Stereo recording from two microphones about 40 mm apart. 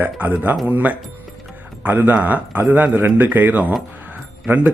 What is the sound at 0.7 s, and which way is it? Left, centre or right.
Speech, right.